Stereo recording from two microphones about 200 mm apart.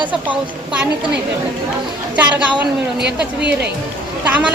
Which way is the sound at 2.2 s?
5° right (ahead or behind).